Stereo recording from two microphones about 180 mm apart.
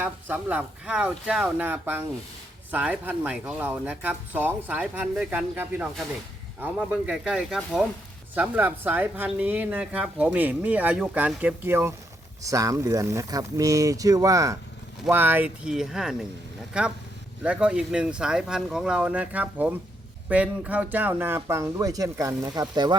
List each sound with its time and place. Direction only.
0.0 s speech: 10° right (ahead or behind); by 23.0 s 25° right (ahead or behind)